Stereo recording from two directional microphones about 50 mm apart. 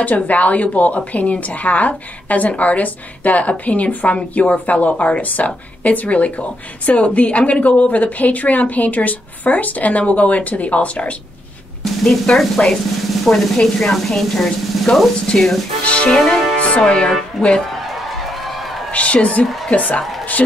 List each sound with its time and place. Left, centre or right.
0.0 s a woman's voice: left
11.8 s drum: centre
12.6 s a woman's voice: left
13.3 s speech: centre
15.8 s music: left
16.5 s speech: left
18.9 s a woman's voice: left